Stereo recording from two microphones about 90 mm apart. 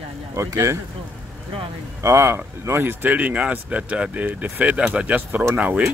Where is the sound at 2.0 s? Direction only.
30° right (ahead or behind).